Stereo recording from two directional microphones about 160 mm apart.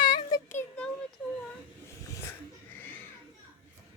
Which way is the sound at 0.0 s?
30° left (ahead or behind).